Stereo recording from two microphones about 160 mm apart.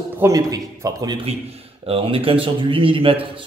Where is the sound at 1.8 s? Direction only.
35° right (ahead or behind).